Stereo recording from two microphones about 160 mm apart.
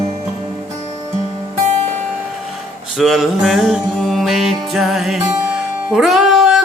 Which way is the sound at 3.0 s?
Centre (ahead or behind).